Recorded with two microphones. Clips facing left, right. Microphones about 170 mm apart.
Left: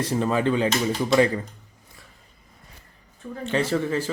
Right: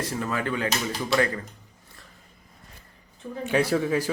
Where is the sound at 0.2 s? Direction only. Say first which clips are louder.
Left 7 dB; 25° left (ahead or behind).